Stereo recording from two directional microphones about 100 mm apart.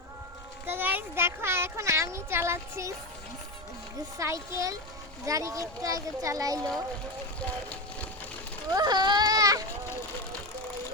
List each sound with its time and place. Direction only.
0.7 s a sound: 20° right (ahead or behind)
4.2 s a child's voice: 30° right (ahead or behind)
8.7 s a child's voice: 45° right (ahead or behind)